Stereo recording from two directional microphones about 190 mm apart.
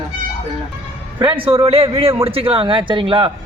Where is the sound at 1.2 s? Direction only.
25° right (ahead or behind).